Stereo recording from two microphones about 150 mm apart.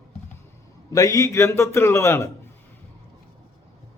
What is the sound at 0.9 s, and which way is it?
A man's voice, 20° left (ahead or behind).